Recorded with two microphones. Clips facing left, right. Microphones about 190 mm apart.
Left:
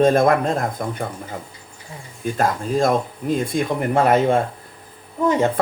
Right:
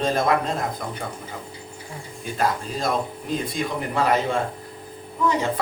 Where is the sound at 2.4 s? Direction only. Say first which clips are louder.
Left 5 dB; 50° left (ahead or behind).